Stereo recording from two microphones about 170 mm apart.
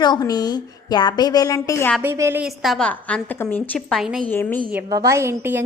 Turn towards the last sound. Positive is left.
turn(degrees=-15)  # may be behind; listen again after turning